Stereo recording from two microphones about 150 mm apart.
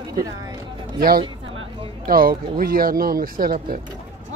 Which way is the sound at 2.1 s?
75° right (ahead or behind).